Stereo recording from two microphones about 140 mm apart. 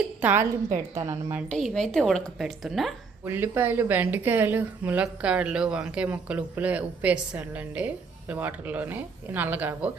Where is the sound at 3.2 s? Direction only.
15° right (ahead or behind).